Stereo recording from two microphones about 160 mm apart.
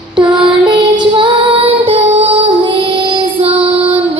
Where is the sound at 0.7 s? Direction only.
30° right (ahead or behind).